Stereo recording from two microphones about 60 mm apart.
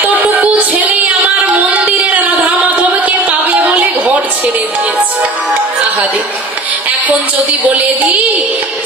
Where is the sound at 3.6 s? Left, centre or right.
Right.